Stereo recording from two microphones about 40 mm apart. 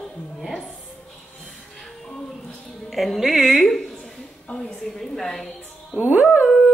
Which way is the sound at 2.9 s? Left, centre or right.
Centre.